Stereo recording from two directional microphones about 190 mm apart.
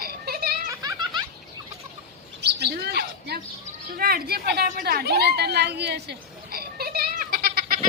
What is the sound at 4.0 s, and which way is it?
A woman's voice, 50° right (ahead or behind).